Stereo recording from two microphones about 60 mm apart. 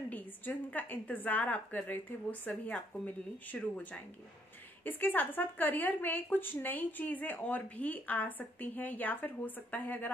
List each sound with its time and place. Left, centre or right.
0.1 s speech: left